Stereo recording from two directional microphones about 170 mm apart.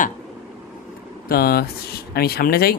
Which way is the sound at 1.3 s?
65° left (ahead or behind).